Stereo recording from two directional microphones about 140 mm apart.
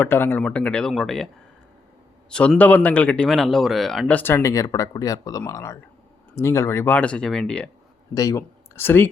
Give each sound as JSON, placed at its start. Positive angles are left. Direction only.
{"t": 0.0, "sound": "a man's voice", "side_deg": 15}
{"t": 2.6, "sound": "a man's voice", "side_deg": 10}
{"t": 4.0, "sound": "speech", "side_deg": 15}
{"t": 8.1, "sound": "speech", "side_deg": 25}